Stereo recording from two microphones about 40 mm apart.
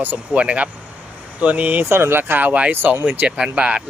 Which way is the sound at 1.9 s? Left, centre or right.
Right.